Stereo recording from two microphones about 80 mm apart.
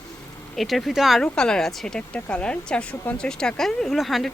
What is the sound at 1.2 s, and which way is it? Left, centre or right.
A woman's voice, centre.